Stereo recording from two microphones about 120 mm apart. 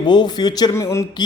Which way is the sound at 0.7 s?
25° left (ahead or behind).